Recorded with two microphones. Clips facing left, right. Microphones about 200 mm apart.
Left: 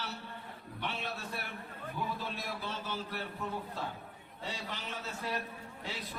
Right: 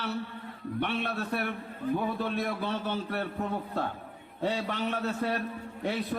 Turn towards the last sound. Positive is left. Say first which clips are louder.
# right 12 dB
turn(degrees=-60)  # may be behind; listen again after turning